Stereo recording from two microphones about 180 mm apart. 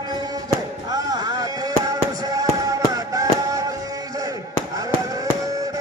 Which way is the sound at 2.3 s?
20° right (ahead or behind).